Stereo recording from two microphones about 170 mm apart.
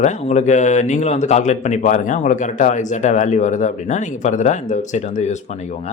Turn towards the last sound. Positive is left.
turn(degrees=45)  # may be behind; listen again after turning